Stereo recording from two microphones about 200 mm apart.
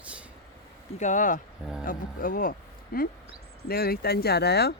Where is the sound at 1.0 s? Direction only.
40° left (ahead or behind).